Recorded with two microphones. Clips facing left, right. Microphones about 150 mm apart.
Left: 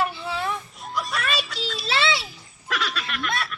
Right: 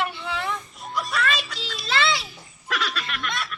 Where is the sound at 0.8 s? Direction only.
Centre (ahead or behind).